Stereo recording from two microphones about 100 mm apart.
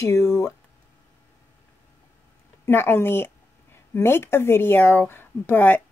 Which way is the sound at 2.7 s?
25° left (ahead or behind).